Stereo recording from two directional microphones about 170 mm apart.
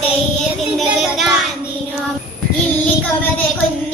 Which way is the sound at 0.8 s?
Centre (ahead or behind).